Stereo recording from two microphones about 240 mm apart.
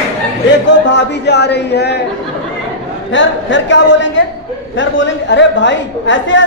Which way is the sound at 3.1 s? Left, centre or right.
Left.